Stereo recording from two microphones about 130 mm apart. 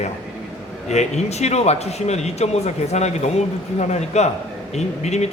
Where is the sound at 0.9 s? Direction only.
60° left (ahead or behind).